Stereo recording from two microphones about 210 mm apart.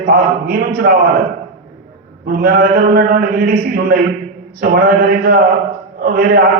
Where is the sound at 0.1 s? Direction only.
45° right (ahead or behind).